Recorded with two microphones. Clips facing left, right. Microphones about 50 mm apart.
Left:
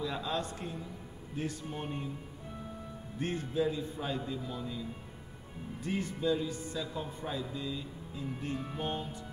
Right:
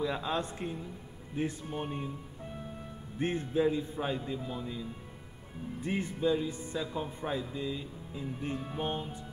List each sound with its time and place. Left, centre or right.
0.0 s speech: centre
3.2 s a man's voice: right